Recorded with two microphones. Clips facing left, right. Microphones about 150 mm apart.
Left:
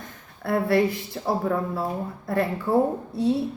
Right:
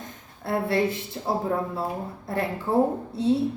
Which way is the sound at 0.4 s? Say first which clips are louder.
Left 3 dB; 20° right (ahead or behind).